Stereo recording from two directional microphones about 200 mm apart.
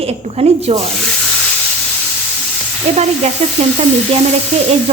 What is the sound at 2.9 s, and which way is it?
Speech, 30° right (ahead or behind).